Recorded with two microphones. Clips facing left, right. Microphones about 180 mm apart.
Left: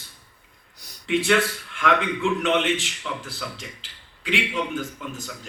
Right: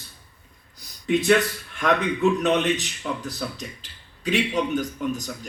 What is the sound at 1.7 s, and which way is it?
A man's voice, 40° right (ahead or behind).